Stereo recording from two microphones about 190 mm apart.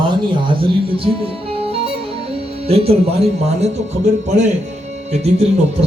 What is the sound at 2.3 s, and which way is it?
Music, 30° right (ahead or behind).